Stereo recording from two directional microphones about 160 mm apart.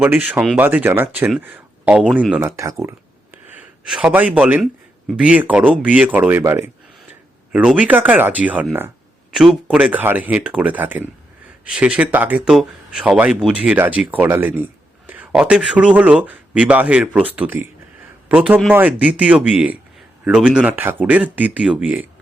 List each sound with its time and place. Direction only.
0.0 s speech: 10° right (ahead or behind)
3.8 s speech: 5° right (ahead or behind)